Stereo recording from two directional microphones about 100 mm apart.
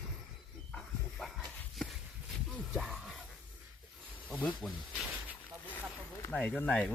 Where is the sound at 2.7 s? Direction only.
Centre (ahead or behind).